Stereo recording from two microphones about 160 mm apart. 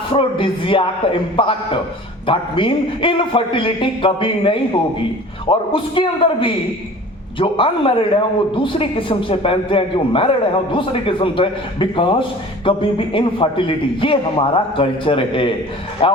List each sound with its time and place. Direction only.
0.1 s a man's voice: 30° left (ahead or behind)